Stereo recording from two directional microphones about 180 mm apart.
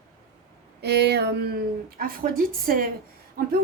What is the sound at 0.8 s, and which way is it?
A woman's voice, 65° right (ahead or behind).